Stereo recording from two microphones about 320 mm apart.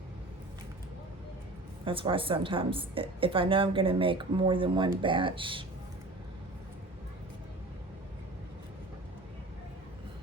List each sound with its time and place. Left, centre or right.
1.8 s a woman's voice: centre